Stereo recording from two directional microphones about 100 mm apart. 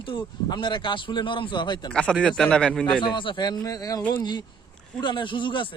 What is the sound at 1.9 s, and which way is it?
Speech, 10° left (ahead or behind).